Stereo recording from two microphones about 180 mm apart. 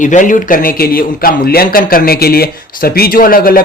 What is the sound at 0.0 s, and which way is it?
A man's voice, 45° left (ahead or behind).